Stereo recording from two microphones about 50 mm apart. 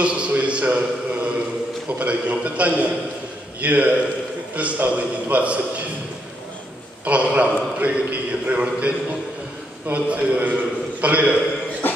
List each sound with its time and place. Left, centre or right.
0.0 s a man's voice: right
7.1 s a man's voice: right
9.9 s a man's voice: right
11.8 s cough: left